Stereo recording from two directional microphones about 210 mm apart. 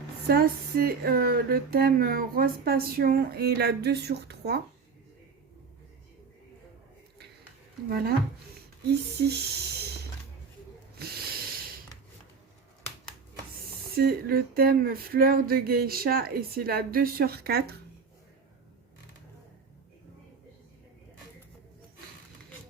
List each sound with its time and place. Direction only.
0.3 s speech: 45° right (ahead or behind)
7.9 s speech: 50° right (ahead or behind)
13.9 s speech: 45° right (ahead or behind)